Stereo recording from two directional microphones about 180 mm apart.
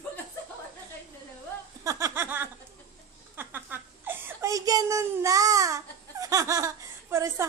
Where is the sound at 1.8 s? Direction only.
15° right (ahead or behind).